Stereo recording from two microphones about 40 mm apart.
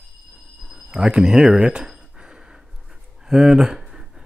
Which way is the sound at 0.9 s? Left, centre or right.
Centre.